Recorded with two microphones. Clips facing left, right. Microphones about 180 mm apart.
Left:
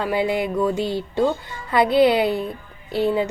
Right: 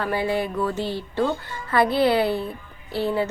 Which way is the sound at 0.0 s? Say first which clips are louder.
Left 2 dB; 15° left (ahead or behind).